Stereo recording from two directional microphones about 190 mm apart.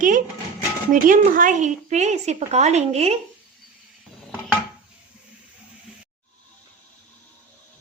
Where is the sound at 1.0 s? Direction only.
45° right (ahead or behind).